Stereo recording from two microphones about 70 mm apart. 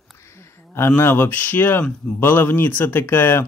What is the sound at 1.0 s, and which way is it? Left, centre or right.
Speech, left.